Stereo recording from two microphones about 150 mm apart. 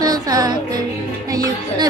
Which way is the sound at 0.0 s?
25° right (ahead or behind).